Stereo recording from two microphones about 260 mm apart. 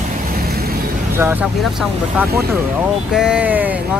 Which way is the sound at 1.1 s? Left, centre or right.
Centre.